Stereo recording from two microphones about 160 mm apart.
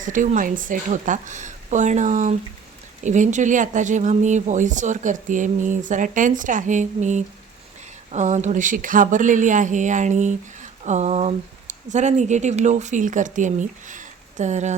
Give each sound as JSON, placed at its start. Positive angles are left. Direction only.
{"t": 0.0, "sound": "speech", "side_deg": -55}